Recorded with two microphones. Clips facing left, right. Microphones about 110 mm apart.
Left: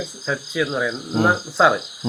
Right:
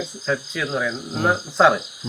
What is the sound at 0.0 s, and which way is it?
Cricket, 5° left (ahead or behind).